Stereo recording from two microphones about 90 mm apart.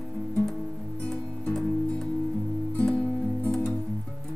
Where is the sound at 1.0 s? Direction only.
5° left (ahead or behind).